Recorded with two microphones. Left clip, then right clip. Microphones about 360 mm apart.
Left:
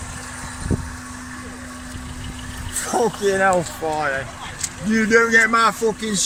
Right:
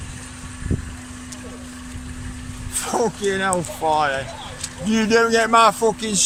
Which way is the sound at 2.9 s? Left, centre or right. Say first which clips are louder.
Left 2 dB; centre.